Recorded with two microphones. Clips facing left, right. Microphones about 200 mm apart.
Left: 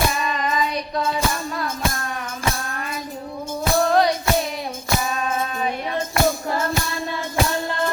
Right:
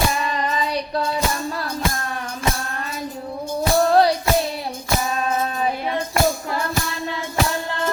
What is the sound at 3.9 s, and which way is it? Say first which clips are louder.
Music: right 2 dB; 30° right (ahead or behind).